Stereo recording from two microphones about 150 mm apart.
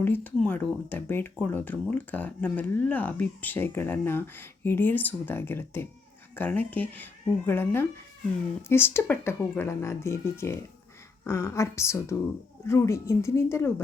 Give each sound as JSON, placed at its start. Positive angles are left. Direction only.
{"t": 0.0, "sound": "speech", "side_deg": 15}